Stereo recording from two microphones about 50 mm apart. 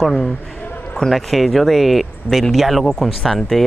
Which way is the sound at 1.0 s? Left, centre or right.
Centre.